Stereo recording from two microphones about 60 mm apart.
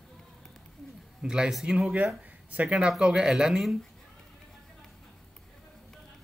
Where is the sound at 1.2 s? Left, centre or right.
Centre.